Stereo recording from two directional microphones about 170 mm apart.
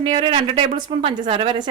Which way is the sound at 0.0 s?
30° right (ahead or behind).